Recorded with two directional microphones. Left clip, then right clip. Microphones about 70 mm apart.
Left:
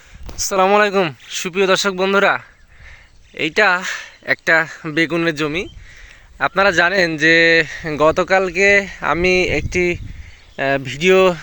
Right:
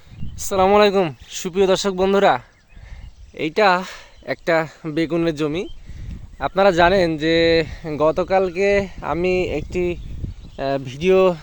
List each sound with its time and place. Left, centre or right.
0.3 s a man's voice: centre
1.3 s speech: right
3.3 s speech: right
5.2 s speech: right
6.4 s a man's voice: centre
7.7 s speech: centre